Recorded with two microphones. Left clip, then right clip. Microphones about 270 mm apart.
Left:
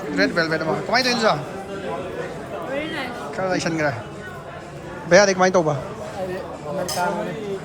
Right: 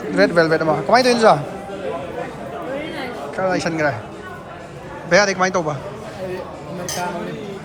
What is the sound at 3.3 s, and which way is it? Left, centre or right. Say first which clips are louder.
Speech: right 3 dB; centre.